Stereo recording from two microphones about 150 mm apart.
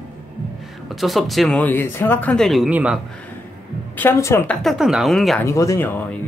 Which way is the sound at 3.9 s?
15° left (ahead or behind).